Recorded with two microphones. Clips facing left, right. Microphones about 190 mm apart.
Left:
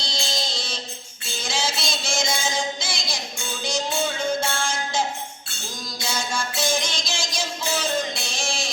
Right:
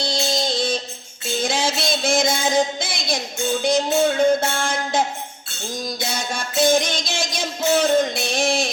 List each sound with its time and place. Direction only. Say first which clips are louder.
0.0 s music: right 8 dB; 55° right (ahead or behind)
1.4 s a sound: right 6 dB; 55° right (ahead or behind)
3.6 s music: right 7 dB; 55° right (ahead or behind)